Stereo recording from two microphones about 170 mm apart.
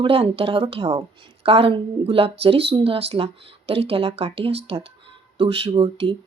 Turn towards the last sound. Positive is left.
turn(degrees=-35)  # may be behind; listen again after turning